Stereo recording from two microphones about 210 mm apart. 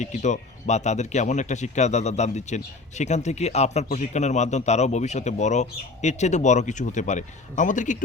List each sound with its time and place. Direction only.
0.0 s speech: 35° left (ahead or behind)